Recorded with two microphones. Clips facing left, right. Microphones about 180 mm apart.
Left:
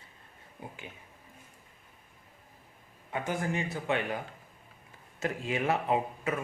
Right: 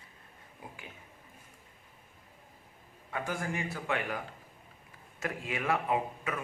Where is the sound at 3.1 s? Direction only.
20° left (ahead or behind).